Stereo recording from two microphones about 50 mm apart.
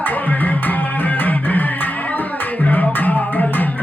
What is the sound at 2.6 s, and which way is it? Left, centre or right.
Music, left.